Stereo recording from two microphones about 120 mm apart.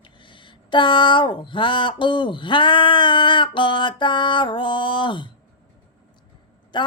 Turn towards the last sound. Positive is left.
turn(degrees=40)  # may be behind; listen again after turning